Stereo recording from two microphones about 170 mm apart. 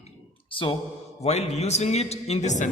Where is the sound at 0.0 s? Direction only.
30° left (ahead or behind).